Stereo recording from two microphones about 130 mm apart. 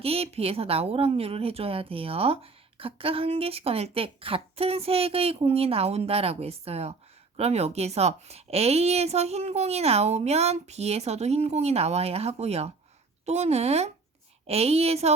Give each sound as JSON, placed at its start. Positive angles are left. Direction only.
{"t": 0.0, "sound": "a woman's voice", "side_deg": -50}